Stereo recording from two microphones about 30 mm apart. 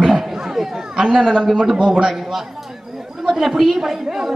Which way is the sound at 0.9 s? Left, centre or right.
Centre.